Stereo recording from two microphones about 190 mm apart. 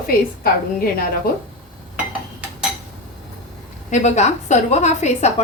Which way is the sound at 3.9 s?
40° left (ahead or behind).